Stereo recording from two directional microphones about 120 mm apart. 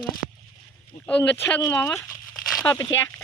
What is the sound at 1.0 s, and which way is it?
Speech, 15° left (ahead or behind).